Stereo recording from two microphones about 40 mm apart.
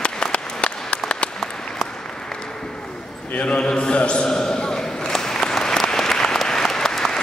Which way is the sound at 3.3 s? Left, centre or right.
Left.